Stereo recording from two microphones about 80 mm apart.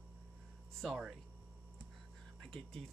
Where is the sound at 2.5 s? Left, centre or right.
Centre.